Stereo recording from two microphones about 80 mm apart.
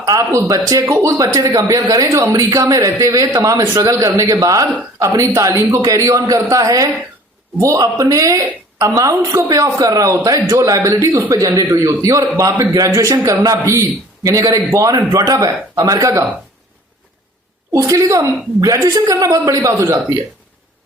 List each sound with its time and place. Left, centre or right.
0.0 s a man's voice: right
11.3 s a man's voice: right
17.7 s a man's voice: right